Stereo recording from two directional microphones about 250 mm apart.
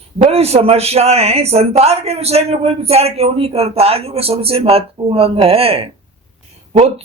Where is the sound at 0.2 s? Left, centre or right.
Right.